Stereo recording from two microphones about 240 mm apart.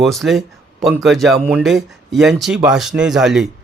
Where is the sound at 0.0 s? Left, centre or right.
Centre.